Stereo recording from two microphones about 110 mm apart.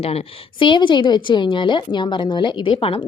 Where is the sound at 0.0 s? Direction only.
65° left (ahead or behind).